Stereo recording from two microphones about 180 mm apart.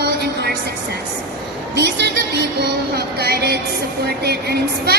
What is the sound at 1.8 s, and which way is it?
Music, 70° right (ahead or behind).